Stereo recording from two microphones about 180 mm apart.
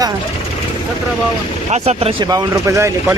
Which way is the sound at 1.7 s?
35° right (ahead or behind).